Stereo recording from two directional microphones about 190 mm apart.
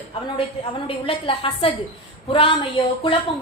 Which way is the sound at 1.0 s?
30° left (ahead or behind).